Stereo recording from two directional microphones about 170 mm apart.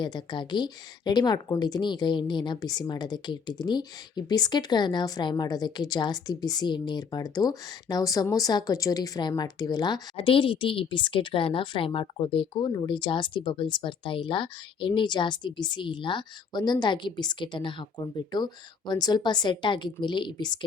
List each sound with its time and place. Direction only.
0.0 s a woman's voice: 25° left (ahead or behind)